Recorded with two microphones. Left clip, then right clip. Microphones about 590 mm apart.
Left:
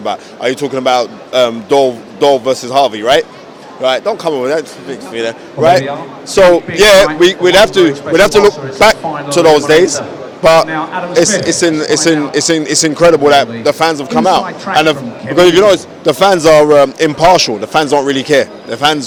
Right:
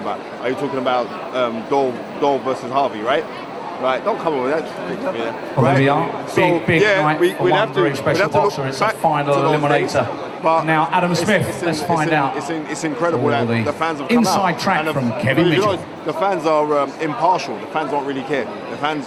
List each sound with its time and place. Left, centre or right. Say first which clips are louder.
0.1 s speech: left 8 dB; left
6.3 s speech: left 9 dB; left